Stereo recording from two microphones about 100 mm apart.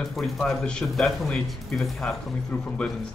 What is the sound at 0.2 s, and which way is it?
A man's voice, 5° left (ahead or behind).